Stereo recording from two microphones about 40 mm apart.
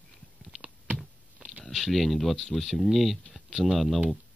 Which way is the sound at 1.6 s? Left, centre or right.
Centre.